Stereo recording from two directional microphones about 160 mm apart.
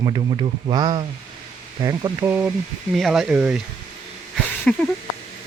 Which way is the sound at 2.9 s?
Centre (ahead or behind).